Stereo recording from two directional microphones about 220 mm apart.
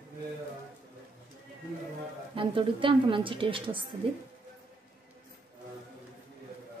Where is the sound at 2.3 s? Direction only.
25° right (ahead or behind).